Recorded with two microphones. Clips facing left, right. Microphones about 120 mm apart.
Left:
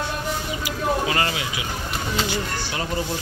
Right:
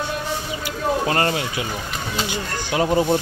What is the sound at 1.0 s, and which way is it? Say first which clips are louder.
Speech: right 3 dB; 40° right (ahead or behind).